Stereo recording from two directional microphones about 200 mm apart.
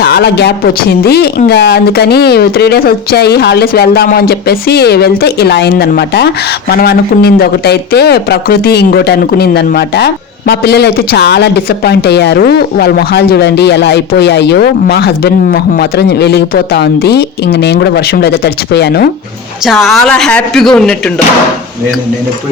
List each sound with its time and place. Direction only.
0.0 s speech: 55° left (ahead or behind)
19.6 s a woman's voice: centre (ahead or behind)